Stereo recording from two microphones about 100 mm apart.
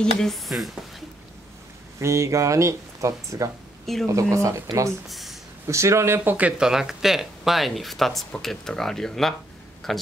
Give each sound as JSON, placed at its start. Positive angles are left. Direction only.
{"t": 0.0, "sound": "speech", "side_deg": 5}
{"t": 2.0, "sound": "speech", "side_deg": -30}
{"t": 3.8, "sound": "speech", "side_deg": 0}
{"t": 4.1, "sound": "speech", "side_deg": -30}
{"t": 5.0, "sound": "speech", "side_deg": 0}
{"t": 5.7, "sound": "speech", "side_deg": -30}